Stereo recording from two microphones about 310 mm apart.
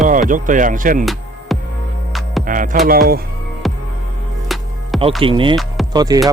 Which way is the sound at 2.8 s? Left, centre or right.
Right.